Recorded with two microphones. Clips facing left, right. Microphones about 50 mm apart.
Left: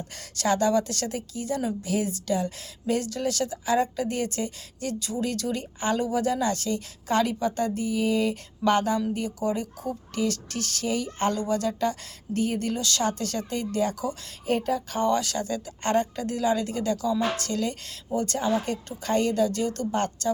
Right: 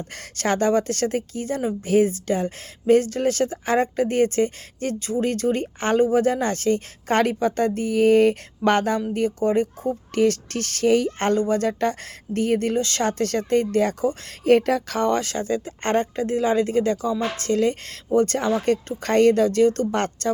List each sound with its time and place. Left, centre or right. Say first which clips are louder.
0.1 s a woman's voice: right 1 dB; right
11.3 s speech: right 5 dB; right
14.4 s speech: right 8 dB; right
15.1 s a woman's voice: right 3 dB; right